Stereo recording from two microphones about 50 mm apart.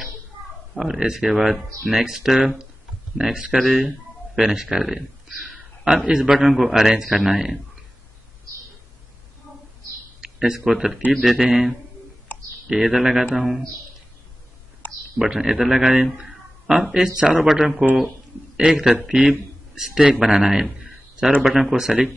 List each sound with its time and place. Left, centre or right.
0.7 s speech: centre
10.2 s speech: centre
11.1 s a man's voice: centre
12.6 s speech: centre
15.1 s a man's voice: centre